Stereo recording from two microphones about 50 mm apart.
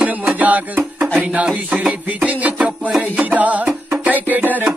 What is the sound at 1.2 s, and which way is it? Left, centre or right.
Speech, right.